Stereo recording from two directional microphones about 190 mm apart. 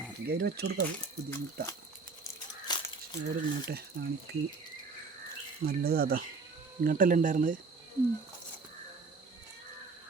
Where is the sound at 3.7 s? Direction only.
55° right (ahead or behind).